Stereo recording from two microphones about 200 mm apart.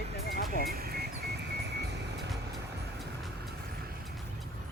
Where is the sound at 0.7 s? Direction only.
50° right (ahead or behind).